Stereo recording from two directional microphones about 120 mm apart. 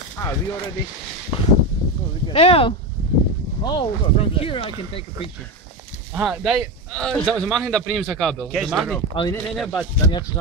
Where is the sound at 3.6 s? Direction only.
40° left (ahead or behind).